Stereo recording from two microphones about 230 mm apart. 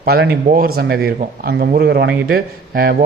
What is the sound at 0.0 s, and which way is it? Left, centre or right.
A man's voice, right.